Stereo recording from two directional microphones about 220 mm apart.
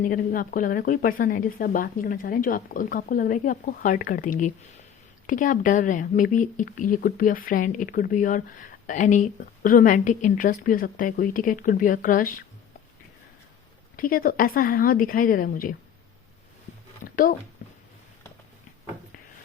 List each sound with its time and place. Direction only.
0.0 s a woman's voice: 40° left (ahead or behind)
13.9 s a woman's voice: 40° left (ahead or behind)
17.0 s a sound: 40° left (ahead or behind)